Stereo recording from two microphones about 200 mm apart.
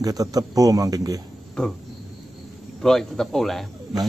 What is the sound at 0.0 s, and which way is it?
Speech, 20° right (ahead or behind).